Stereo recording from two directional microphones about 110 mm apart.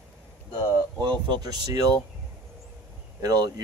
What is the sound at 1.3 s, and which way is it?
Speech, 35° right (ahead or behind).